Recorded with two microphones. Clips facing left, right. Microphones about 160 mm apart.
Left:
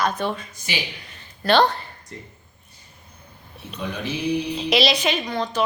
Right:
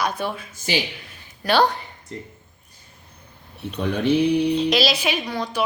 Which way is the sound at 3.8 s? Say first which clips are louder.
Right 8 dB; 60° right (ahead or behind).